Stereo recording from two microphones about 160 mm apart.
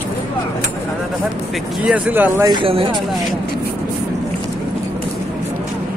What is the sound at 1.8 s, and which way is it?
Speech, 5° right (ahead or behind).